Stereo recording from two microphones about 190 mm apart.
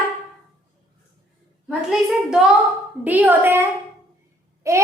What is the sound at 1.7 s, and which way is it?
A woman's voice, 5° right (ahead or behind).